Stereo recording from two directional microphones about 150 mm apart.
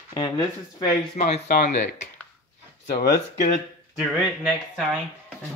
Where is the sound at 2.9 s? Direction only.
90° left.